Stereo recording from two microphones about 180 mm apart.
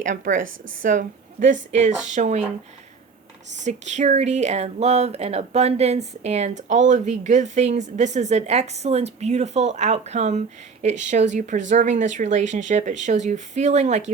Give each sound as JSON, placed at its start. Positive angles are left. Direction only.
{"t": 0.0, "sound": "a woman's voice", "side_deg": -45}
{"t": 3.6, "sound": "speech", "side_deg": -40}